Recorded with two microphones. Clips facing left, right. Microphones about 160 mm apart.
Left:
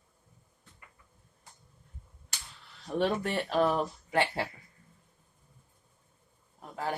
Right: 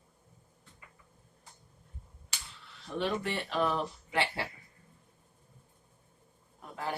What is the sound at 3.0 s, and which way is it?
Speech, 45° left (ahead or behind).